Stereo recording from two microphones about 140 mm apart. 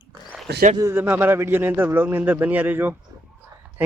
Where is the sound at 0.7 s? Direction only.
20° right (ahead or behind).